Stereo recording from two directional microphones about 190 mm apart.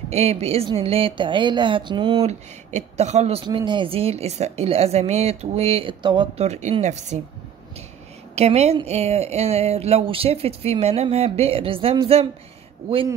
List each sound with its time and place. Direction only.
0.1 s speech: 35° right (ahead or behind)
8.4 s speech: 35° right (ahead or behind)